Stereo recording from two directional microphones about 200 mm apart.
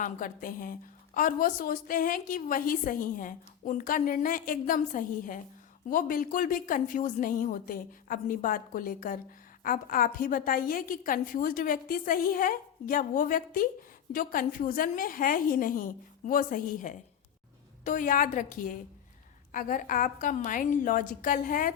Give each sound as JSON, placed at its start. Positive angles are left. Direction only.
{"t": 0.0, "sound": "a woman's voice", "side_deg": 40}